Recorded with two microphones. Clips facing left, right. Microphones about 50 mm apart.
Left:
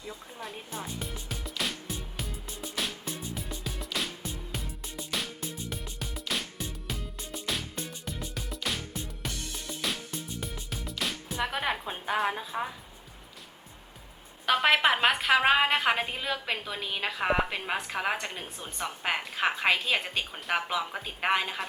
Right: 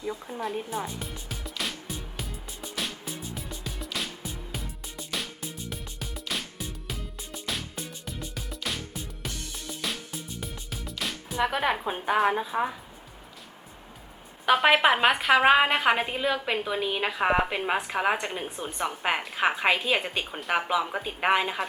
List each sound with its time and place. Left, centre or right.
0.0 s speech: centre
0.4 s speech: centre
0.9 s music: centre
11.9 s a woman's voice: centre
14.4 s a woman's voice: centre